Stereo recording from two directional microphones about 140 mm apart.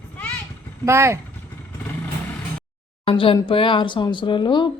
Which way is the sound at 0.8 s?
20° right (ahead or behind).